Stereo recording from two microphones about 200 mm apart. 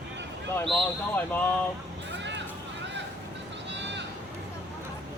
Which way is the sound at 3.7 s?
60° right (ahead or behind).